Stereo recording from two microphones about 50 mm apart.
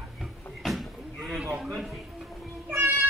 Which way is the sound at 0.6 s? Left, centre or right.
Centre.